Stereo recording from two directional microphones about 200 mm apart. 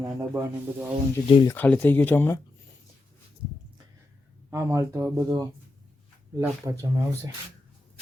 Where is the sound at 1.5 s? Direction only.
10° left (ahead or behind).